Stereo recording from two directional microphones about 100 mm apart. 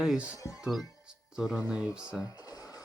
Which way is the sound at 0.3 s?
35° left (ahead or behind).